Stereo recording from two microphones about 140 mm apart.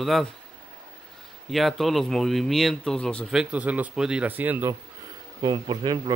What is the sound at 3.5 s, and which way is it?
A man's voice, 10° right (ahead or behind).